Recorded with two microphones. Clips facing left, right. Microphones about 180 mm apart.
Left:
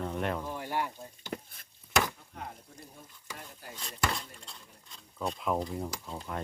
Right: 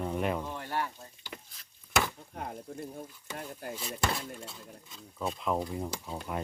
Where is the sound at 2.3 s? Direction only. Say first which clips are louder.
Right 5 dB; 50° right (ahead or behind).